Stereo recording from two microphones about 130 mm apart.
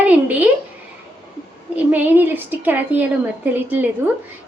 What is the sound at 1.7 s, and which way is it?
A woman's voice, 15° right (ahead or behind).